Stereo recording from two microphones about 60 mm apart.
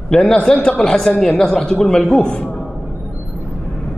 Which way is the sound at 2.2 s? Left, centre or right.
Left.